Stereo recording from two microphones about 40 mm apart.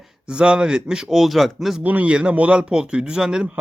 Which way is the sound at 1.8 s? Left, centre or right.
Right.